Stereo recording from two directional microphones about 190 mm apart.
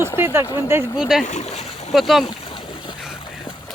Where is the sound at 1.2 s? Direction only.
35° left (ahead or behind).